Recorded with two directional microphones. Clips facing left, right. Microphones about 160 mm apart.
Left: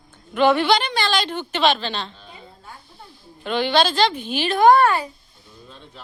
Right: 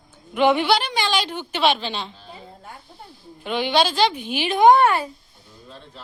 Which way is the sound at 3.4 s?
10° right (ahead or behind).